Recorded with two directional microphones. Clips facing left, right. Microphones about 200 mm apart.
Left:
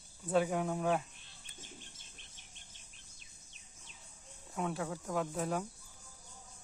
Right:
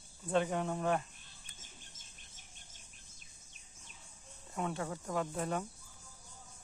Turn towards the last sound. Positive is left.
turn(degrees=5)  # may be behind; listen again after turning